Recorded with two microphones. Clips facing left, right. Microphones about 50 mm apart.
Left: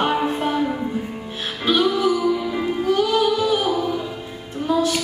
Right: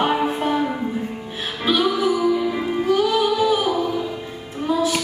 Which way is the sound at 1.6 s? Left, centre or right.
Centre.